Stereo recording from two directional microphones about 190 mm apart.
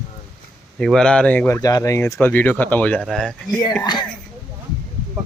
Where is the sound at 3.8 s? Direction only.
20° left (ahead or behind).